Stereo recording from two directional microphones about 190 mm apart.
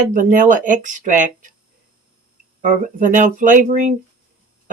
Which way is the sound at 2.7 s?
45° right (ahead or behind).